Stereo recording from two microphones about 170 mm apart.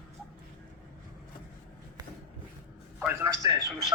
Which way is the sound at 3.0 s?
10° right (ahead or behind).